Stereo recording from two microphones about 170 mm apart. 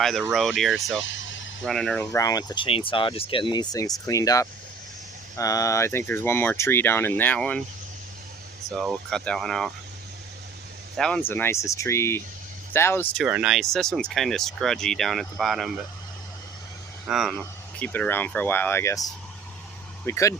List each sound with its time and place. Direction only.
0.0 s speech: centre (ahead or behind)
1.0 s vehicle: 90° left
1.6 s speech: 5° left (ahead or behind)
8.7 s speech: centre (ahead or behind)
10.9 s speech: 5° left (ahead or behind)
13.1 s speech: 5° right (ahead or behind)
17.1 s speech: centre (ahead or behind); by 19.0 s 15° left (ahead or behind)
20.1 s speech: 15° left (ahead or behind)